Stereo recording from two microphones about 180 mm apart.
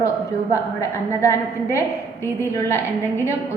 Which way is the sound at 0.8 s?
15° left (ahead or behind).